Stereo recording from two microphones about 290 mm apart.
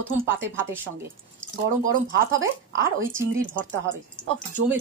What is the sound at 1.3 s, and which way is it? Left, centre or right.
Speech, right.